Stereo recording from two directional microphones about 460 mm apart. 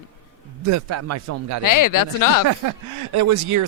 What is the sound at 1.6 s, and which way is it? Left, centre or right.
Speech, left.